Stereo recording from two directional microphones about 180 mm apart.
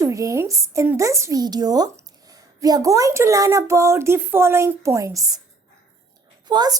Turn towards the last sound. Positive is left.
turn(degrees=-25)  # may be behind; listen again after turning